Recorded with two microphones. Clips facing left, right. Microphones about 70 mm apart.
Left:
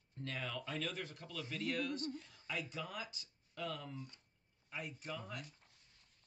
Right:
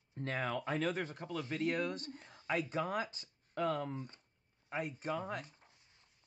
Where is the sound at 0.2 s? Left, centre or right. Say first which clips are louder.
Right 7 dB; right.